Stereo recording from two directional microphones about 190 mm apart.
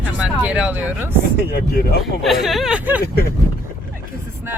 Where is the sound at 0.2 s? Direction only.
5° right (ahead or behind).